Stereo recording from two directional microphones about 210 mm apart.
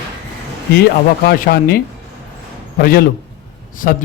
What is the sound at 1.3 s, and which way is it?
A man's voice, 45° left (ahead or behind).